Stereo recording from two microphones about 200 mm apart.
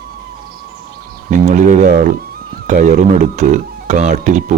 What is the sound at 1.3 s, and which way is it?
Speech, 40° right (ahead or behind).